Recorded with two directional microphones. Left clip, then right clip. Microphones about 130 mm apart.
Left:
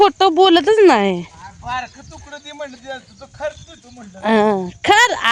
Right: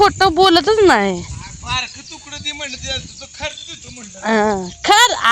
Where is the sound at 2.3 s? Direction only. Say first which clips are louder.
Right 5 dB; 65° left (ahead or behind); by 3.0 s 80° left.